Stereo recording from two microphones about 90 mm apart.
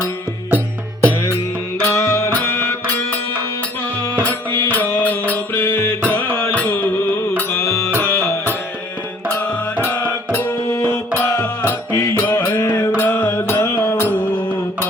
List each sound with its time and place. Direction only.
1.8 s music: 30° left (ahead or behind)
9.3 s music: 20° left (ahead or behind)